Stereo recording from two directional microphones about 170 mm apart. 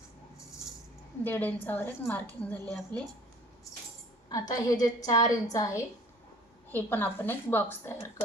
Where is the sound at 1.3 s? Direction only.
10° left (ahead or behind).